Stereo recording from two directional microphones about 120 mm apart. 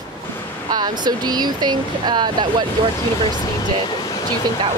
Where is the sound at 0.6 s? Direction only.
35° right (ahead or behind).